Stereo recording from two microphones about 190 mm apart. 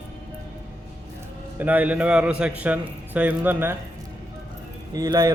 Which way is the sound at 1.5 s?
10° right (ahead or behind).